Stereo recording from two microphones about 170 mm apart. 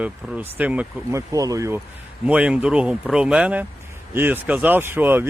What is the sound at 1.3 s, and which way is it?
Speech, 20° right (ahead or behind).